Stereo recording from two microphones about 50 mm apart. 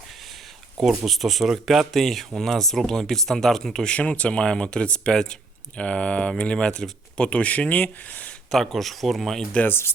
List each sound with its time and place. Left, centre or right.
0.8 s speech: centre
3.9 s speech: left
8.4 s speech: centre
9.6 s speech: left